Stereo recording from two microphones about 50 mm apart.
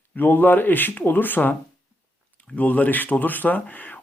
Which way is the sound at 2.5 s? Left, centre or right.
Left.